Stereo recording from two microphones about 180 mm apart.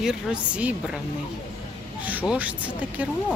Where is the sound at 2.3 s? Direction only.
10° right (ahead or behind).